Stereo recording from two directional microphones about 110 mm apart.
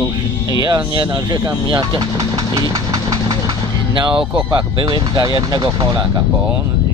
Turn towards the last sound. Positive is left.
turn(degrees=-40)  # may be behind; listen again after turning